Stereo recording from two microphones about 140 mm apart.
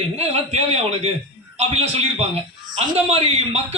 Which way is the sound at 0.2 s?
45° right (ahead or behind).